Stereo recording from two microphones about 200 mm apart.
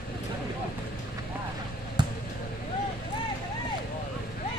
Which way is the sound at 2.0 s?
20° right (ahead or behind).